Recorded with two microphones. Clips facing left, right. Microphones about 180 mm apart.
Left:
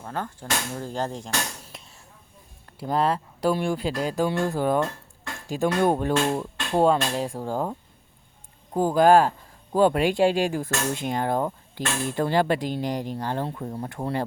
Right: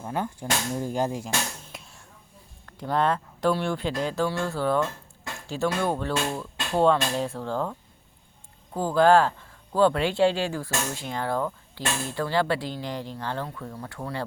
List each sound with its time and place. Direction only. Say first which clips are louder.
0.0 s speech: right 2 dB; 15° right (ahead or behind)
1.6 s a sound: right 1 dB; centre (ahead or behind)
2.7 s speech: left 1 dB; 10° left (ahead or behind)
8.7 s speech: left 2 dB; 15° left (ahead or behind)